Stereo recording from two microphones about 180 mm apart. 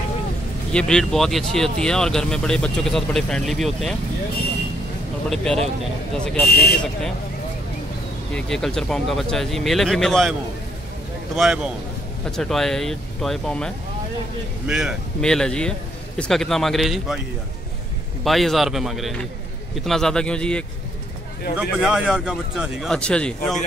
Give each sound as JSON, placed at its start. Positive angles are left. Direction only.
{"t": 0.7, "sound": "speech", "side_deg": 5}
{"t": 5.3, "sound": "speech", "side_deg": 5}
{"t": 6.4, "sound": "speech", "side_deg": 60}
{"t": 8.4, "sound": "speech", "side_deg": 5}
{"t": 11.3, "sound": "speech", "side_deg": -5}
{"t": 14.7, "sound": "speech", "side_deg": -5}
{"t": 18.2, "sound": "speech", "side_deg": 0}
{"t": 21.5, "sound": "speech", "side_deg": -5}